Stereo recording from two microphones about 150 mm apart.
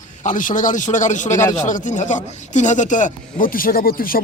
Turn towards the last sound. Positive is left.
turn(degrees=75)  # may be behind; listen again after turning